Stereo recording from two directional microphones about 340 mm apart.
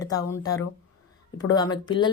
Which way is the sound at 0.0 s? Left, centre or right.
Centre.